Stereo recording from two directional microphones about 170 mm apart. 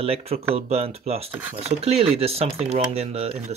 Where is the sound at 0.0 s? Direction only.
35° right (ahead or behind).